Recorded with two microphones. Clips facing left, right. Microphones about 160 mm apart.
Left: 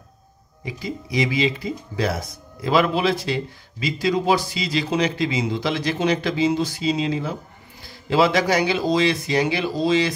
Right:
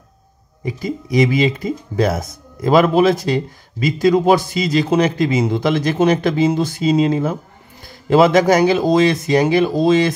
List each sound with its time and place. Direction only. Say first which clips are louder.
0.7 s speech: right 7 dB; 45° right (ahead or behind)